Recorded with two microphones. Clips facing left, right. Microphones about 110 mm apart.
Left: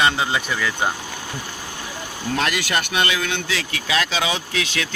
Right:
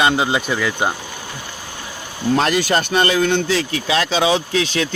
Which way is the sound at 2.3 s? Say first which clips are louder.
Right 5 dB; 35° right (ahead or behind).